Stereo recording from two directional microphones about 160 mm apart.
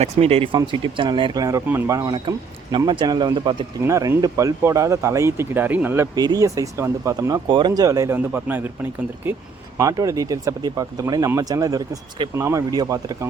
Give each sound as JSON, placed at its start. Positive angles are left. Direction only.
{"t": 0.0, "sound": "speech", "side_deg": -40}
{"t": 3.8, "sound": "speech", "side_deg": -20}
{"t": 6.1, "sound": "speech", "side_deg": -25}